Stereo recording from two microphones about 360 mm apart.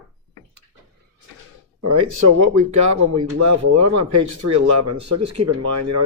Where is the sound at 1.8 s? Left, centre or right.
Right.